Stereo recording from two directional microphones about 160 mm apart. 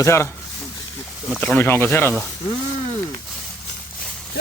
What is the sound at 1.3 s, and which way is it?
Speech, centre (ahead or behind).